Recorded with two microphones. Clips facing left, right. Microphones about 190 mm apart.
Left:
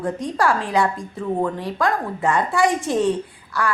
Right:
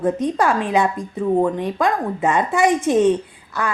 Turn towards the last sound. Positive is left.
turn(degrees=-20)  # may be behind; listen again after turning